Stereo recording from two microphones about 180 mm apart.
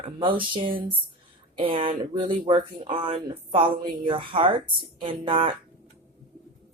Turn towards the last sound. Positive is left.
turn(degrees=-30)  # may be behind; listen again after turning